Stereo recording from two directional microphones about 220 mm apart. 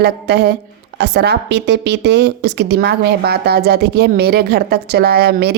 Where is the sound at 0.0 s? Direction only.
50° right (ahead or behind).